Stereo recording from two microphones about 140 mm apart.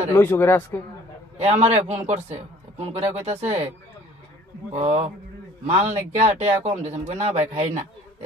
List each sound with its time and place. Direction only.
0.1 s speech: 15° left (ahead or behind)
1.4 s speech: 50° right (ahead or behind)
4.7 s a man's voice: 45° right (ahead or behind)